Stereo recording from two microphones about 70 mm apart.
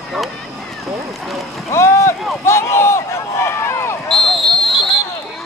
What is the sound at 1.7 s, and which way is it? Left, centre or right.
Boat, left.